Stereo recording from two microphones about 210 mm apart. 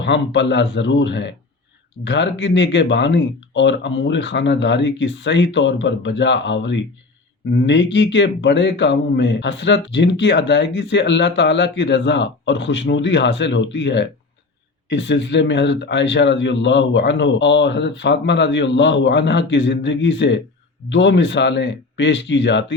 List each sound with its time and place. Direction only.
0.0 s speech: 55° left (ahead or behind)